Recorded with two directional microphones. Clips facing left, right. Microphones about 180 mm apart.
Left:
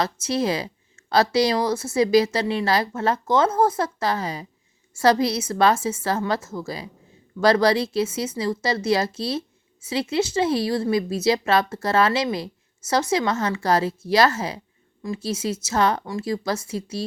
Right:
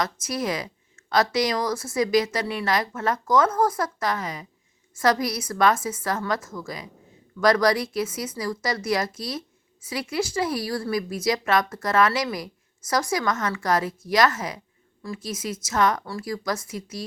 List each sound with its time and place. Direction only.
0.0 s speech: 25° left (ahead or behind)